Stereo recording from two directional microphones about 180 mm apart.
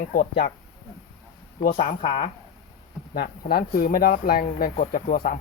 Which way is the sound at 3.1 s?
55° left (ahead or behind).